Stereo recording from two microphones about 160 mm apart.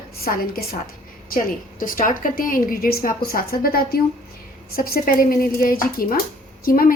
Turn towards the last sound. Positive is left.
turn(degrees=65)  # may be behind; listen again after turning